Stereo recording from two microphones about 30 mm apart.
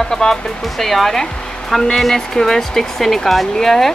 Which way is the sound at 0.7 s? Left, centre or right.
Centre.